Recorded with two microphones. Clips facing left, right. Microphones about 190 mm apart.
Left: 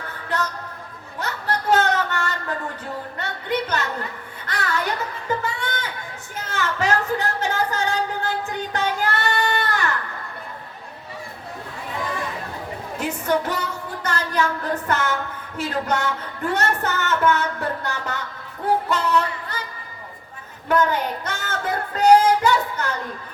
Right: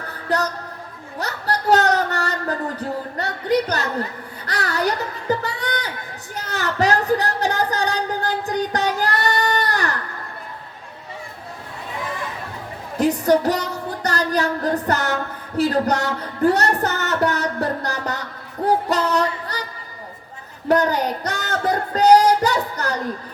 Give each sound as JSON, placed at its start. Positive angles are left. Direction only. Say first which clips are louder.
{"t": 0.1, "sound": "music", "louder": "right 5 dB", "side_deg": -40}
{"t": 1.2, "sound": "a sound", "louder": "right 2 dB", "side_deg": -40}
{"t": 13.0, "sound": "music", "louder": "right 7 dB", "side_deg": -35}
{"t": 20.7, "sound": "child singing", "louder": "right 2 dB", "side_deg": -35}